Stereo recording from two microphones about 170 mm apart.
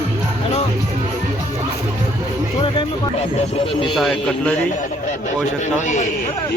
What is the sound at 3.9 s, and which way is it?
Speech, centre (ahead or behind).